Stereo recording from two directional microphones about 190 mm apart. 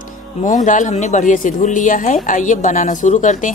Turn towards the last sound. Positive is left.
turn(degrees=40)  # may be behind; listen again after turning